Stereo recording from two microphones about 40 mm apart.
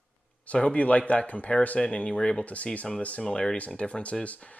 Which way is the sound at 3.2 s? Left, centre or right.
Left.